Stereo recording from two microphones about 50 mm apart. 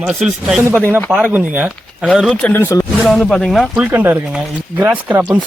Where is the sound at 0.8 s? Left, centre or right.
Right.